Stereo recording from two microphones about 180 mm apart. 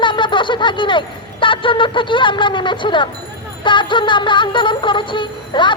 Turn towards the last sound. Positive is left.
turn(degrees=25)  # may be behind; listen again after turning